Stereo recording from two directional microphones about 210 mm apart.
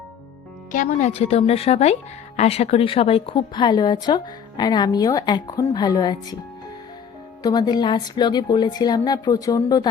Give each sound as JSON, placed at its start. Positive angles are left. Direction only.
{"t": 0.7, "sound": "speech", "side_deg": 35}
{"t": 7.4, "sound": "speech", "side_deg": 20}